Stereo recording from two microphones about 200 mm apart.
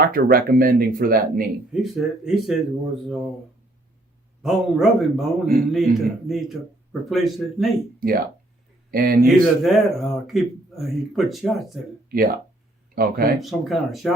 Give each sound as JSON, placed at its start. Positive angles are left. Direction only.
{"t": 0.0, "sound": "speech", "side_deg": -50}
{"t": 1.7, "sound": "speech", "side_deg": 0}
{"t": 4.4, "sound": "speech", "side_deg": 0}
{"t": 7.9, "sound": "speech", "side_deg": -45}
{"t": 9.2, "sound": "speech", "side_deg": 0}
{"t": 12.0, "sound": "speech", "side_deg": -45}
{"t": 13.4, "sound": "speech", "side_deg": 0}